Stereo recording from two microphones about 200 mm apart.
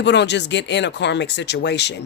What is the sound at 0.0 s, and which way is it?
Speech, 60° left (ahead or behind).